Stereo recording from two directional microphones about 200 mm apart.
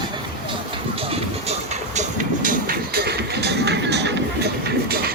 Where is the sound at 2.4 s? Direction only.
45° right (ahead or behind).